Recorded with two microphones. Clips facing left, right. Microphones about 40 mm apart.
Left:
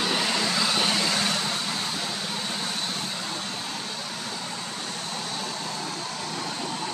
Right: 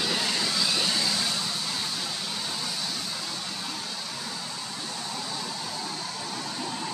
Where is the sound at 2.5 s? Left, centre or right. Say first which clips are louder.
Left 3 dB; left.